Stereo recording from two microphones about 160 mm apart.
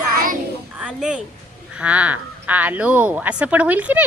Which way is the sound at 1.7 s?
10° right (ahead or behind).